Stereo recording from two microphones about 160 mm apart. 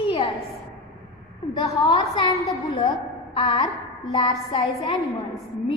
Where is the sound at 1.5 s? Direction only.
30° left (ahead or behind).